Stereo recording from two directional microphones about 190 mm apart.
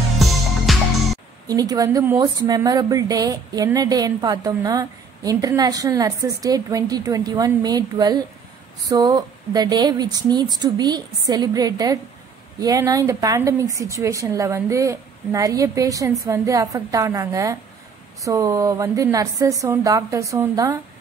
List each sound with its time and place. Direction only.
0.7 s music: centre (ahead or behind)
1.5 s a woman's voice: 20° right (ahead or behind)